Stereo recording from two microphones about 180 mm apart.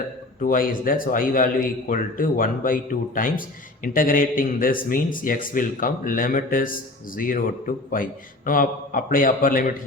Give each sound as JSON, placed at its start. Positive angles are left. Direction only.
{"t": 0.4, "sound": "a man's voice", "side_deg": 50}